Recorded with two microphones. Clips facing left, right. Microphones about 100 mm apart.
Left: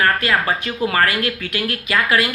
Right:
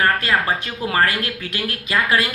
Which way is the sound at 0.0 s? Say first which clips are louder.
Left 1 dB; 25° right (ahead or behind).